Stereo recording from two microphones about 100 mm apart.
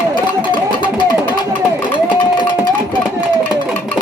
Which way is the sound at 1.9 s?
50° left (ahead or behind).